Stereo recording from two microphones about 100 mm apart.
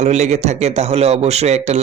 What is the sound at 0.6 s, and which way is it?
Speech, 90° right.